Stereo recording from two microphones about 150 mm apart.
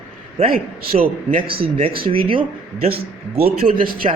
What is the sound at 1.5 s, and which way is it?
A man's voice, 40° right (ahead or behind).